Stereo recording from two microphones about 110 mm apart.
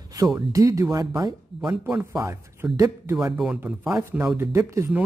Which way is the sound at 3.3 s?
10° right (ahead or behind).